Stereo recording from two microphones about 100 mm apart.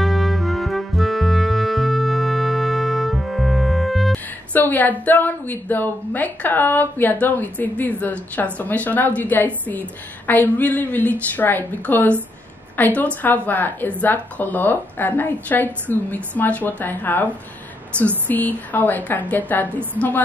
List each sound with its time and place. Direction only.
0.0 s music: centre (ahead or behind)
4.6 s a woman's voice: 15° left (ahead or behind)